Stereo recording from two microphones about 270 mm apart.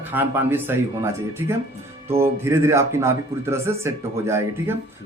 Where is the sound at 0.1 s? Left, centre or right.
Centre.